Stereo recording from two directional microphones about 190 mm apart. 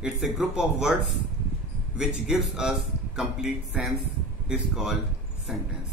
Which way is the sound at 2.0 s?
5° right (ahead or behind).